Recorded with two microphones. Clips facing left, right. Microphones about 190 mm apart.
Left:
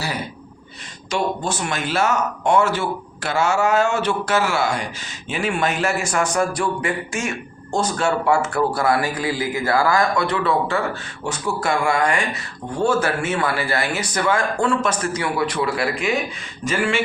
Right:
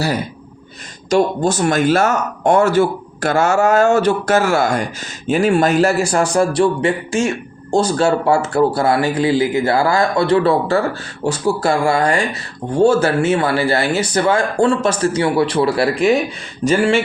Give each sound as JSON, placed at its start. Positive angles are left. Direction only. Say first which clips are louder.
{"t": 1.1, "sound": "a man's voice", "louder": "right 8 dB", "side_deg": -40}